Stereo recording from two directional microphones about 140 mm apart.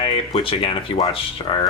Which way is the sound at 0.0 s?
40° left (ahead or behind).